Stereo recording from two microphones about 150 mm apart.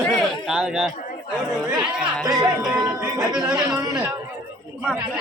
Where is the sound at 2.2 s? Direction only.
25° right (ahead or behind).